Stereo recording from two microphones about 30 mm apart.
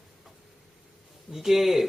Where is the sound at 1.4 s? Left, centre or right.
Centre.